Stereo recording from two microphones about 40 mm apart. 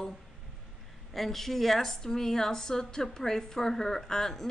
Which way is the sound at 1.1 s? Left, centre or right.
Centre.